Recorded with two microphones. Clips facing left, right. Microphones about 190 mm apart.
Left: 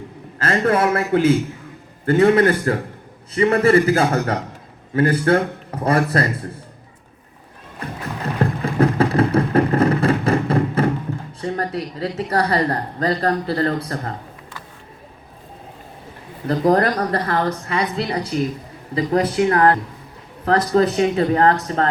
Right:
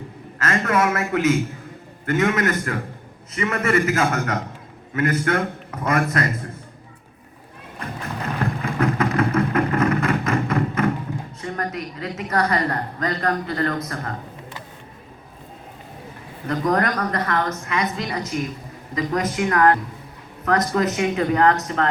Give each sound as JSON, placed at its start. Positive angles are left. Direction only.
{"t": 0.3, "sound": "a man's voice", "side_deg": 30}
{"t": 8.4, "sound": "a sound", "side_deg": 30}
{"t": 11.3, "sound": "a man's voice", "side_deg": 30}
{"t": 16.5, "sound": "a man's voice", "side_deg": 35}